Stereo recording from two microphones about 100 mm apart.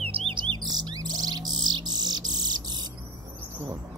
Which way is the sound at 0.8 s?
40° right (ahead or behind).